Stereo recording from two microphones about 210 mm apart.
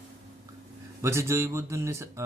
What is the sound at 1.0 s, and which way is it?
Speech, 15° right (ahead or behind).